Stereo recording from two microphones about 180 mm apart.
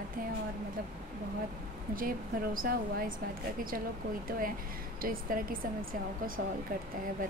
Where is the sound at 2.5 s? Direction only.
55° right (ahead or behind).